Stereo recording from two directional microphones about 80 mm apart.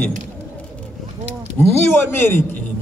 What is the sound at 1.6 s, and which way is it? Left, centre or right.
A man's voice, left.